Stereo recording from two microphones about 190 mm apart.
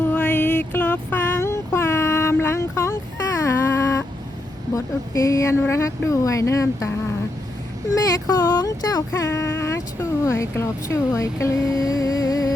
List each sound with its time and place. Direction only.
0.0 s a sound: 10° left (ahead or behind)
4.7 s speech: 15° left (ahead or behind)
7.9 s speech: 15° left (ahead or behind)